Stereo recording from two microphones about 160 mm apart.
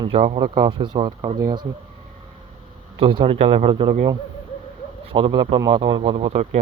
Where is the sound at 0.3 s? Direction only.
30° right (ahead or behind).